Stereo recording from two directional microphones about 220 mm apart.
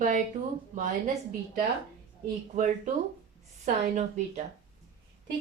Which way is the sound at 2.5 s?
30° right (ahead or behind).